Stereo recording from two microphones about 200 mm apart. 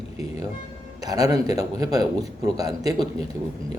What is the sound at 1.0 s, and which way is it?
A man's voice, 20° right (ahead or behind).